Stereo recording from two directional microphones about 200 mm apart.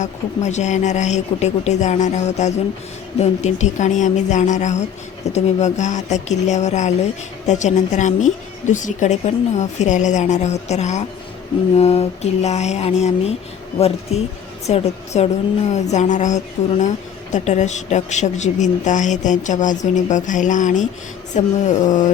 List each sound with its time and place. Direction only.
0.0 s a woman's voice: 35° left (ahead or behind)